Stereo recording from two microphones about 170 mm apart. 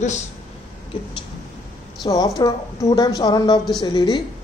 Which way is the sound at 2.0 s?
20° left (ahead or behind).